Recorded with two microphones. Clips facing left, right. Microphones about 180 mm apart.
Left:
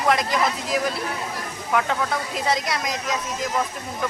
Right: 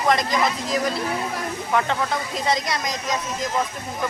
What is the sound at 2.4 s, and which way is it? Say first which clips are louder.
Speech: right 1 dB; 5° left (ahead or behind).